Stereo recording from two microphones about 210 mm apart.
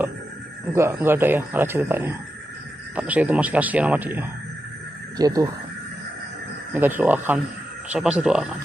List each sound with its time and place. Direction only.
0.7 s speech: 10° right (ahead or behind)
6.7 s speech: 10° right (ahead or behind)